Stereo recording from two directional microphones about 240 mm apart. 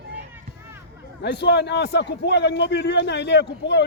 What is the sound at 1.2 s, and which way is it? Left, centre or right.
A man's voice, left.